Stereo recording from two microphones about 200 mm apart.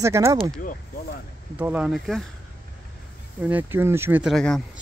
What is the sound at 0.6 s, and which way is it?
Speech, 45° left (ahead or behind).